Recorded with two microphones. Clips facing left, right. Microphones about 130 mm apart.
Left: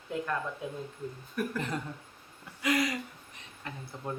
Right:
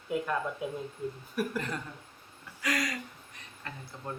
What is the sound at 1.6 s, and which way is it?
Speech, 20° left (ahead or behind).